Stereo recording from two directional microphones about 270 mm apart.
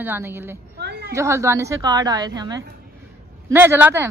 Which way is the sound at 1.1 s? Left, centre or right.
Centre.